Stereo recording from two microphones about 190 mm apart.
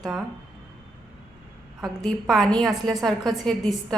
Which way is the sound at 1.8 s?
Centre (ahead or behind).